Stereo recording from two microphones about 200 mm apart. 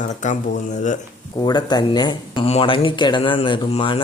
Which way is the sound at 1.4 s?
20° left (ahead or behind).